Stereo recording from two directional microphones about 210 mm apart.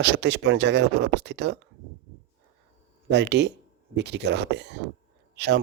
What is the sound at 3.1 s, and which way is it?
Speech, 55° right (ahead or behind).